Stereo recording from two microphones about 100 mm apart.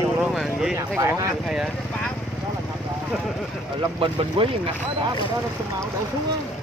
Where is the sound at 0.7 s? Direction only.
30° right (ahead or behind).